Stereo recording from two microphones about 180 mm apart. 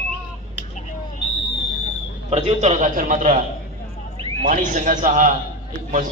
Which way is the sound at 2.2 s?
35° right (ahead or behind).